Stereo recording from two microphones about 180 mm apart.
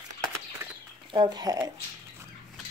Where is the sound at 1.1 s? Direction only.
25° right (ahead or behind).